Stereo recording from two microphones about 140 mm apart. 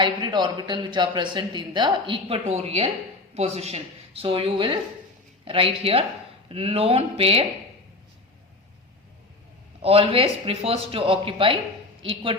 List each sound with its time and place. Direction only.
0.0 s speech: 35° right (ahead or behind)
9.8 s speech: 45° right (ahead or behind)